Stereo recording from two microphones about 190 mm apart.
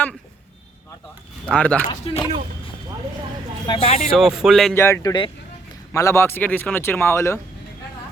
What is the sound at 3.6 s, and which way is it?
Speech, 25° left (ahead or behind).